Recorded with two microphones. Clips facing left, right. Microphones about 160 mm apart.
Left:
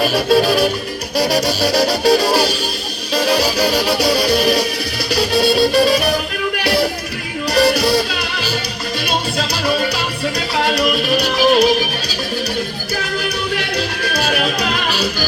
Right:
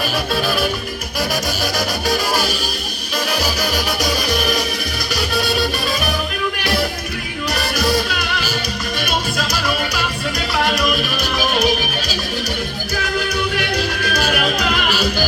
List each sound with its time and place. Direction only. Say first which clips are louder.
0.1 s music: left 7 dB; 35° left (ahead or behind)
7.5 s music: left 7 dB; 35° left (ahead or behind)
9.0 s music: left 3 dB; 30° left (ahead or behind)
14.1 s music: left 1 dB; 30° left (ahead or behind)